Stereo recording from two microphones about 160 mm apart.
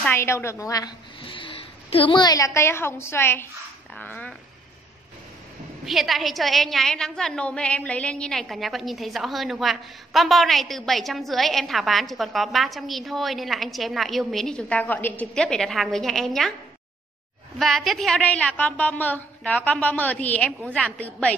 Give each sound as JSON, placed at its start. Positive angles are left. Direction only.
{"t": 0.0, "sound": "a woman's voice", "side_deg": 15}
{"t": 1.2, "sound": "a woman's voice", "side_deg": 30}
{"t": 5.9, "sound": "a woman's voice", "side_deg": 0}
{"t": 17.6, "sound": "a woman's voice", "side_deg": 0}